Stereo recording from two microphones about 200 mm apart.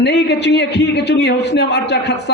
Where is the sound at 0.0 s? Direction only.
60° left (ahead or behind).